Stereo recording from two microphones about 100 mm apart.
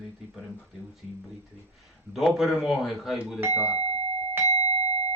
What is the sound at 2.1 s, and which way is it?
Speech, centre (ahead or behind).